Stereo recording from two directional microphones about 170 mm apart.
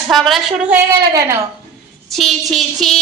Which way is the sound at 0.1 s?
Centre (ahead or behind).